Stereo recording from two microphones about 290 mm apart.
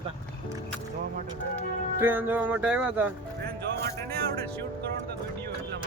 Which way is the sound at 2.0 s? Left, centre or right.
Centre.